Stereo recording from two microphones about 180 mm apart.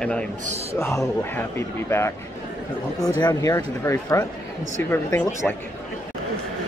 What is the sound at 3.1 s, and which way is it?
A man's voice, 20° left (ahead or behind).